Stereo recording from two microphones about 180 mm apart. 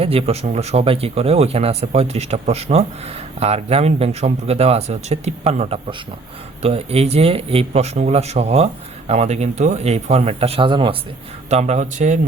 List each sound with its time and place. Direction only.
0.0 s speech: 35° right (ahead or behind)